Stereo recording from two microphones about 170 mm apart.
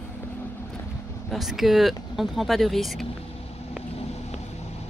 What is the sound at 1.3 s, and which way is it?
Speech, centre (ahead or behind).